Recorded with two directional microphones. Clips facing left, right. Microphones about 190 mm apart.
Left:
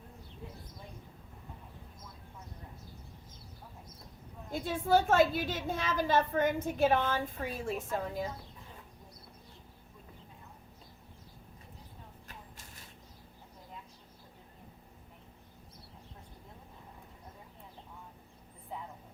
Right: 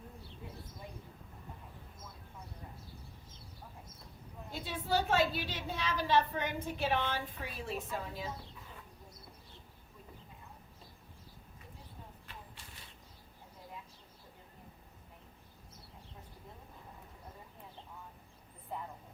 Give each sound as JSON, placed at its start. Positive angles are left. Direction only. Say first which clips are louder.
{"t": 4.5, "sound": "a woman's voice", "louder": "left 6 dB", "side_deg": 50}